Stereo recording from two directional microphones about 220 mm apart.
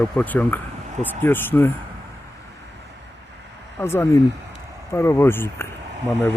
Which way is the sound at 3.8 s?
10° left (ahead or behind).